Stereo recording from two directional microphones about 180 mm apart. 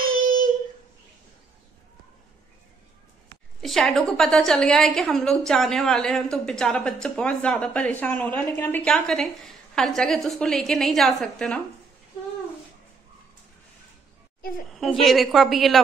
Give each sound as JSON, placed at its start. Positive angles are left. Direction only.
{"t": 0.1, "sound": "child singing", "side_deg": -50}
{"t": 3.6, "sound": "a woman's voice", "side_deg": 0}
{"t": 14.7, "sound": "a woman's voice", "side_deg": 0}